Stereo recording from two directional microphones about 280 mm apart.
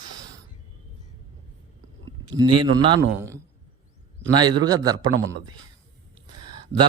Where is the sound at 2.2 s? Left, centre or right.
Centre.